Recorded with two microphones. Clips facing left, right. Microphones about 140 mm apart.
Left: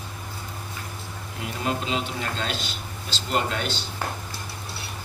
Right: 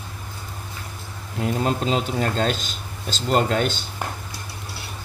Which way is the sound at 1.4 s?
40° right (ahead or behind).